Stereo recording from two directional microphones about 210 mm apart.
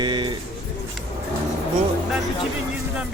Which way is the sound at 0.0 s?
20° right (ahead or behind).